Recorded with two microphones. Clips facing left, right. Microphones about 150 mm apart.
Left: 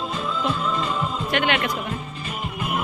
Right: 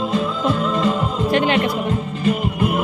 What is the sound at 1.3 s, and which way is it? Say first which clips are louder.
Speech: right 6 dB; 35° right (ahead or behind).